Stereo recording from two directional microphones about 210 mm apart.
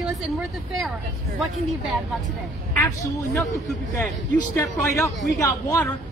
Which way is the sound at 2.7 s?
15° left (ahead or behind).